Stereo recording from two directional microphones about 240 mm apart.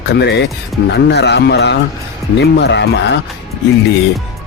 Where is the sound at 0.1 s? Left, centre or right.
Left.